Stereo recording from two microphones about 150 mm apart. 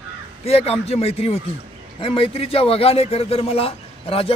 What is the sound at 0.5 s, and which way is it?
Speech, 45° left (ahead or behind).